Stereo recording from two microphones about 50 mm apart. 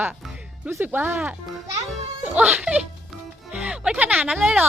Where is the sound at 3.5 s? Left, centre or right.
Right.